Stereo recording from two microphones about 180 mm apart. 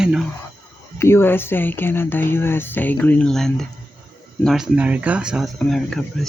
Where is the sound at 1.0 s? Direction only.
15° left (ahead or behind).